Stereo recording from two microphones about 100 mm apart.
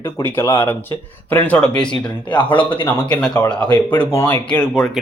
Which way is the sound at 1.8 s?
55° left (ahead or behind).